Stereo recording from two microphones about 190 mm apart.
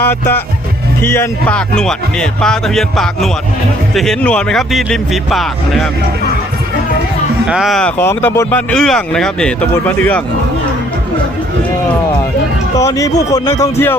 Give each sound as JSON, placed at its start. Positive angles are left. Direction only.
{"t": 0.0, "sound": "speech", "side_deg": 10}
{"t": 7.4, "sound": "speech", "side_deg": -5}
{"t": 12.7, "sound": "speech", "side_deg": 15}